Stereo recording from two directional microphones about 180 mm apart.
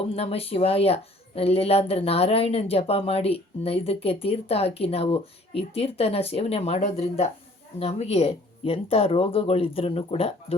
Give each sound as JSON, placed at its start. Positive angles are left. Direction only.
{"t": 0.0, "sound": "speech", "side_deg": 30}